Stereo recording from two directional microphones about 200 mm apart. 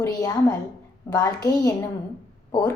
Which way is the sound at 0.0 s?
20° left (ahead or behind).